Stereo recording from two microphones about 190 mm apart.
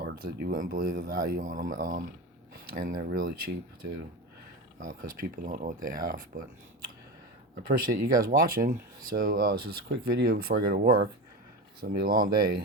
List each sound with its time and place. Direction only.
0.0 s speech: 55° right (ahead or behind)
4.8 s speech: 45° right (ahead or behind)
7.5 s speech: 50° right (ahead or behind)